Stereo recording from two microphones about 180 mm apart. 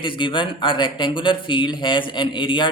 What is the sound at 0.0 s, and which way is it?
A man's voice, 25° left (ahead or behind).